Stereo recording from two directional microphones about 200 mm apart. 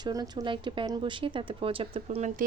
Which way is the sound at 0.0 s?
20° right (ahead or behind).